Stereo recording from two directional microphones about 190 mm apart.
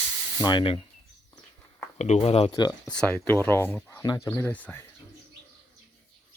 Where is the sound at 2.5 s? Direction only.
20° left (ahead or behind).